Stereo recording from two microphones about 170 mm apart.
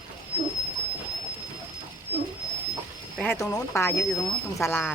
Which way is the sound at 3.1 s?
5° left (ahead or behind).